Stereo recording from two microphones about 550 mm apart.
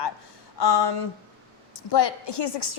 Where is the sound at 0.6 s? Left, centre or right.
Left.